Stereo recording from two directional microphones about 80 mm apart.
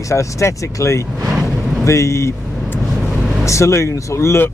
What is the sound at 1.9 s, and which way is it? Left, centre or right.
Speech, left.